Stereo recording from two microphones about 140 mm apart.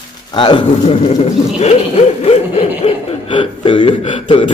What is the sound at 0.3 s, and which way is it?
Speech, 35° left (ahead or behind).